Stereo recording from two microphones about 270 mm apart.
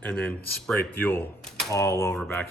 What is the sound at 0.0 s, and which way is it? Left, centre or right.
Speech, centre.